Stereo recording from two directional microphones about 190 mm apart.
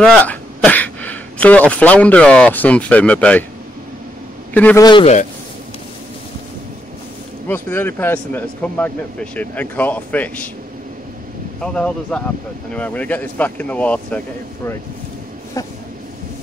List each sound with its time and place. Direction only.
0.0 s speech: 5° left (ahead or behind)
4.6 s a man's voice: 10° left (ahead or behind)
4.8 s a man's voice: 25° left (ahead or behind)
7.4 s a man's voice: 10° left (ahead or behind)
11.6 s a man's voice: 5° left (ahead or behind)
15.6 s a man's voice: 15° left (ahead or behind)